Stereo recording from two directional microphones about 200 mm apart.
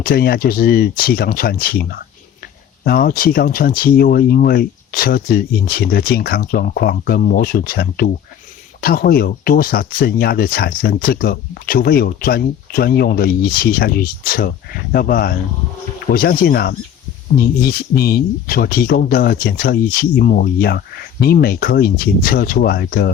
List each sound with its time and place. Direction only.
0.0 s speech: 50° left (ahead or behind)